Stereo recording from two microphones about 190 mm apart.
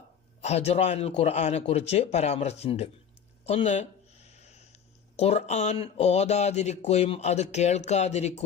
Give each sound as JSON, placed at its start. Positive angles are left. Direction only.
{"t": 0.4, "sound": "speech", "side_deg": 35}